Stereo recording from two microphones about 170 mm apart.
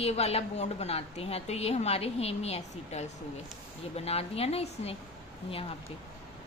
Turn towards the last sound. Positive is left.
turn(degrees=35)  # may be behind; listen again after turning